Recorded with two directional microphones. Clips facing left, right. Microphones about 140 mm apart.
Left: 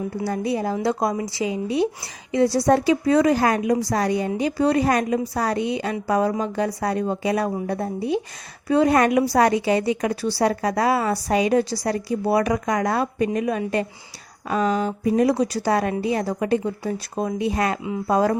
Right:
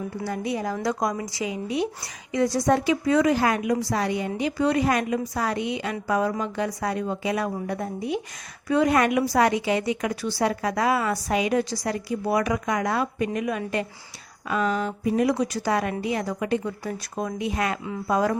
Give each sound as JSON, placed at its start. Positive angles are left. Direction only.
{"t": 0.3, "sound": "a woman's voice", "side_deg": 30}